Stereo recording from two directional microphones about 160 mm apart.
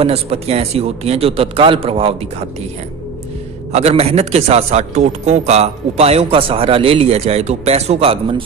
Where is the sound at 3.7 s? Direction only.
40° right (ahead or behind).